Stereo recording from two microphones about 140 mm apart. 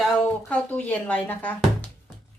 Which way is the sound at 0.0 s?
5° left (ahead or behind).